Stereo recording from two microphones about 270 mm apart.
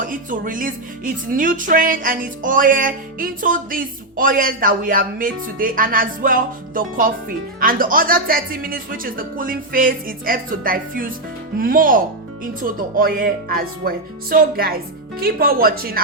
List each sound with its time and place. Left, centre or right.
0.0 s speech: right